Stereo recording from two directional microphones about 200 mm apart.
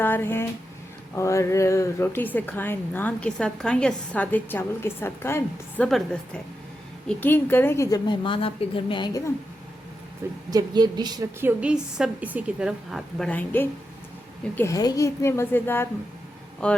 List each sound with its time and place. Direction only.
0.0 s a woman's voice: 10° left (ahead or behind)
7.1 s a woman's voice: 10° left (ahead or behind)
10.5 s a woman's voice: 20° right (ahead or behind); by 16.8 s 5° left (ahead or behind)